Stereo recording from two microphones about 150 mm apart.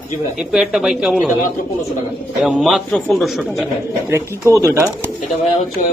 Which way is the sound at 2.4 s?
Centre (ahead or behind).